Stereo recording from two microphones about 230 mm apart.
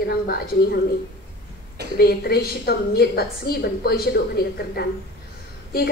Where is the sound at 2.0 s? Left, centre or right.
Left.